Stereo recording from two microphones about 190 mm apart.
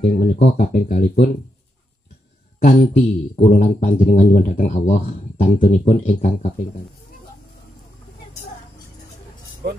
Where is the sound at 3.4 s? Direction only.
40° left (ahead or behind).